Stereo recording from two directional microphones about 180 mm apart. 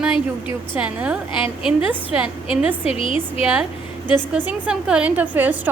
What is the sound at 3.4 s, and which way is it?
A woman's voice, 5° right (ahead or behind).